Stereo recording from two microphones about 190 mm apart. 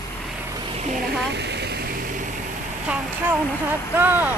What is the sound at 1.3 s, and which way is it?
Waterfall, 65° right (ahead or behind).